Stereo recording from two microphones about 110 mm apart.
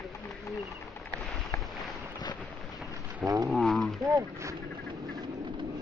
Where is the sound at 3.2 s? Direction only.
30° right (ahead or behind).